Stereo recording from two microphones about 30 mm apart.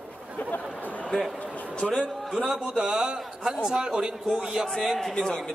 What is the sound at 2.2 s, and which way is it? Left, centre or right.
Speech, centre.